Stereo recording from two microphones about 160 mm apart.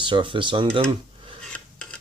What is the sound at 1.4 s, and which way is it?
Filing, 5° left (ahead or behind).